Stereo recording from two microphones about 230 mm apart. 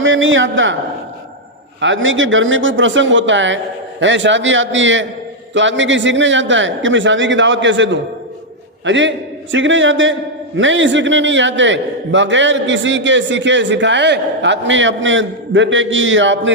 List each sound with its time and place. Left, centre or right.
0.0 s speech: right
1.8 s a man's voice: right